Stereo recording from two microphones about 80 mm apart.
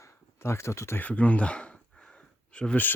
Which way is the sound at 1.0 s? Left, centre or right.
Centre.